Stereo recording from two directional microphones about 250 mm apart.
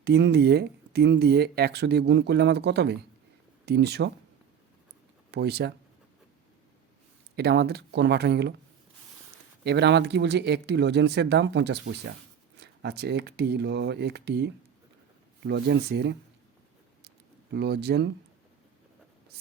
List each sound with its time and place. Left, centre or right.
0.0 s speech: right
5.3 s speech: right
7.3 s speech: right
9.6 s speech: right
17.5 s speech: right